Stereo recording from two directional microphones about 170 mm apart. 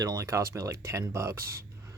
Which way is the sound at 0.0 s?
20° right (ahead or behind).